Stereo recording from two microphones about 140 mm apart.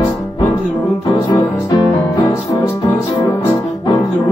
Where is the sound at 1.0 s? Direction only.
35° left (ahead or behind).